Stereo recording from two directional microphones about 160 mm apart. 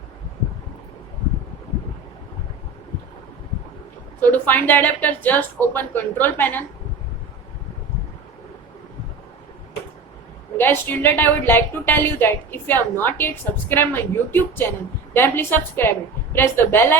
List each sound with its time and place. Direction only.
4.2 s a woman's voice: 10° left (ahead or behind)
10.6 s a woman's voice: 15° left (ahead or behind)